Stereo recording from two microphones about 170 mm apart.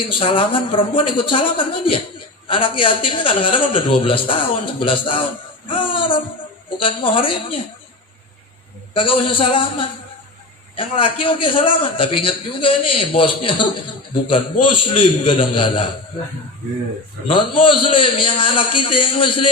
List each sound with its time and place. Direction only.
0.2 s a man's voice: 30° left (ahead or behind)
5.6 s a sound: 30° left (ahead or behind)
6.8 s a man's voice: 30° left (ahead or behind)
8.9 s a man's voice: 30° left (ahead or behind)
17.2 s a man's voice: 30° left (ahead or behind)